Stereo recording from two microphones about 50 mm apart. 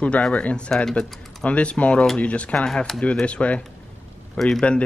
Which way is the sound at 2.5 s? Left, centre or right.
Centre.